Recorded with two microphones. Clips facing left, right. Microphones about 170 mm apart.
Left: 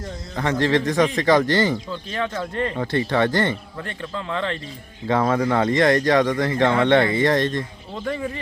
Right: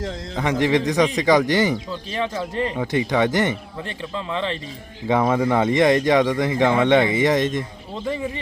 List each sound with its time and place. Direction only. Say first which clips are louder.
0.3 s speech: right 1 dB; 15° right (ahead or behind)
2.3 s speech: right 1 dB; 5° right (ahead or behind)